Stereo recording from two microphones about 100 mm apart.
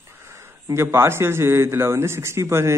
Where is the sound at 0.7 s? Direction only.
25° right (ahead or behind).